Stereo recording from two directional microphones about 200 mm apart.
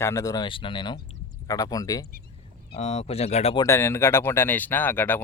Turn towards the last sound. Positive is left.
turn(degrees=10)  # may be behind; listen again after turning